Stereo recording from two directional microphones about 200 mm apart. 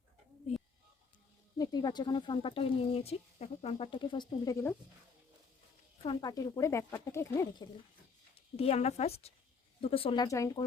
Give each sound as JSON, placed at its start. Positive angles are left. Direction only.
{"t": 1.5, "sound": "speech", "side_deg": 20}
{"t": 6.0, "sound": "speech", "side_deg": 25}
{"t": 8.4, "sound": "a woman's voice", "side_deg": 30}